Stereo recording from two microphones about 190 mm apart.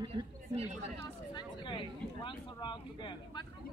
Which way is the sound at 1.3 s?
25° left (ahead or behind).